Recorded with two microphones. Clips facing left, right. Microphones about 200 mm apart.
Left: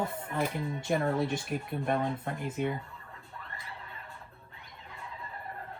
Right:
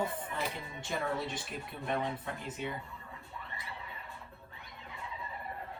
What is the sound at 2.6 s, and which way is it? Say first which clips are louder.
Speech: left 9 dB; 50° left (ahead or behind).